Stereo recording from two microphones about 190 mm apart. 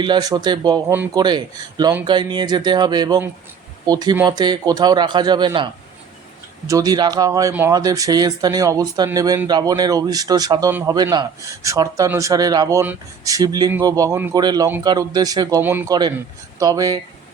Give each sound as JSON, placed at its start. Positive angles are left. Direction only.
{"t": 0.0, "sound": "speech", "side_deg": -20}